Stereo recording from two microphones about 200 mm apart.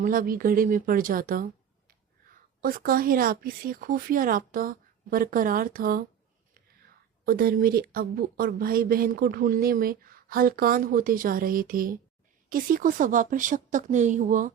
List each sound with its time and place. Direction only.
0.0 s a woman's voice: 45° right (ahead or behind)
7.3 s a woman's voice: 50° right (ahead or behind)